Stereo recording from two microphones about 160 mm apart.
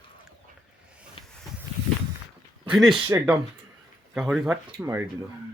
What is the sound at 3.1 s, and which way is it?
Speech, 20° right (ahead or behind).